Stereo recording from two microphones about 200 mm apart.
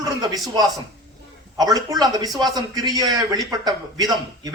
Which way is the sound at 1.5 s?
20° right (ahead or behind).